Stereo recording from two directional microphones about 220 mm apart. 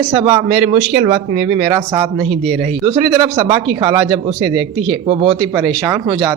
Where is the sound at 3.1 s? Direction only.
20° right (ahead or behind).